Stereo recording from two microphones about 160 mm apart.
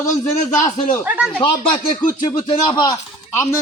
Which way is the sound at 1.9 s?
55° left (ahead or behind).